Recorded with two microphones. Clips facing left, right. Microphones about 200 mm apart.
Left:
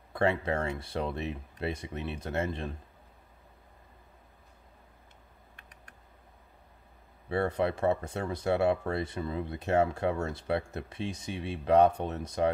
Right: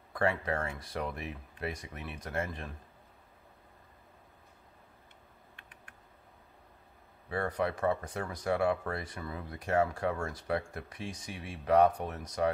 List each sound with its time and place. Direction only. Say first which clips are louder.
0.1 s speech: left 3 dB; 25° left (ahead or behind)
7.2 s speech: left 4 dB; 25° left (ahead or behind)